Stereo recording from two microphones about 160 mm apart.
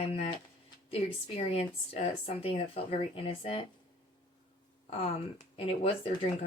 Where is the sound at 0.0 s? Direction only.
35° left (ahead or behind).